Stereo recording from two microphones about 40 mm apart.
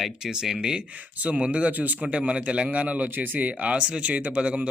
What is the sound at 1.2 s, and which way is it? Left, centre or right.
Speech, right.